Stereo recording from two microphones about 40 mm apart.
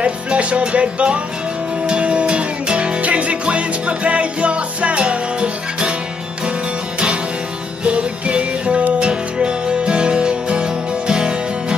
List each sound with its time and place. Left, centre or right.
0.0 s music: right
7.8 s music: right